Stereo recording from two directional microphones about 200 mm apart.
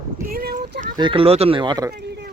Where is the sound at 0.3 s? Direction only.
50° right (ahead or behind).